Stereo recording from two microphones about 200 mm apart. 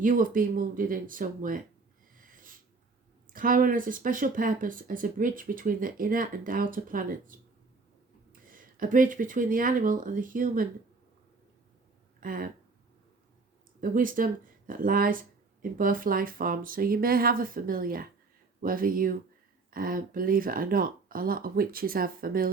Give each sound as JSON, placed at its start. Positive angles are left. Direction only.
{"t": 0.0, "sound": "speech", "side_deg": -40}
{"t": 2.1, "sound": "snort", "side_deg": -45}
{"t": 3.2, "sound": "speech", "side_deg": -45}
{"t": 12.2, "sound": "speech", "side_deg": -45}
{"t": 13.9, "sound": "speech", "side_deg": -45}